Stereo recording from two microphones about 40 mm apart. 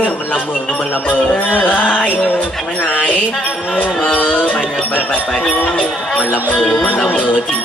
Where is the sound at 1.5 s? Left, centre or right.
Left.